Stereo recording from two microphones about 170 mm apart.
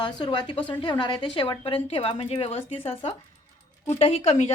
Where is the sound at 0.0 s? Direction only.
25° left (ahead or behind).